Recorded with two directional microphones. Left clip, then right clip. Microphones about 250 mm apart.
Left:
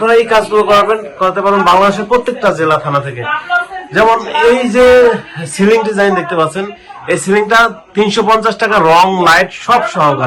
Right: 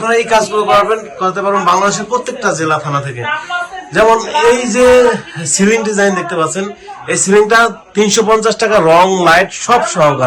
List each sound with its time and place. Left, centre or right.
0.0 s a man's voice: centre